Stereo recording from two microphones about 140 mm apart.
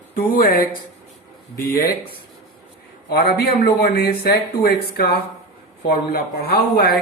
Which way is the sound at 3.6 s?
90° left.